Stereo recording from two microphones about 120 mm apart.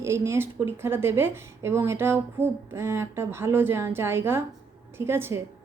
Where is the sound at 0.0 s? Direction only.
20° right (ahead or behind).